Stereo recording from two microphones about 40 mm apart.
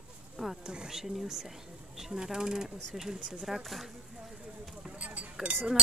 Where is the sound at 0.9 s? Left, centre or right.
Centre.